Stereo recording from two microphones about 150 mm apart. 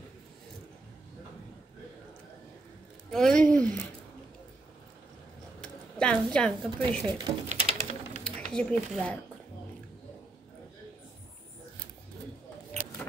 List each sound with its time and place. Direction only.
3.1 s speech: 5° left (ahead or behind)
5.6 s speech: 5° left (ahead or behind)
7.4 s a sound: 45° right (ahead or behind)
8.2 s speech: 5° left (ahead or behind)